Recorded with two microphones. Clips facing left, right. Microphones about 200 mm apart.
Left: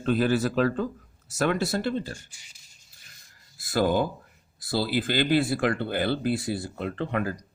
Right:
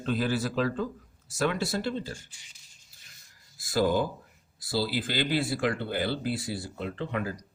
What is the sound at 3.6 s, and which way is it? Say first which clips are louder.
Speech: left 2 dB; 55° left (ahead or behind).